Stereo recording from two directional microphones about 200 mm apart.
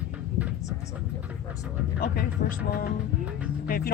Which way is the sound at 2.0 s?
45° left (ahead or behind).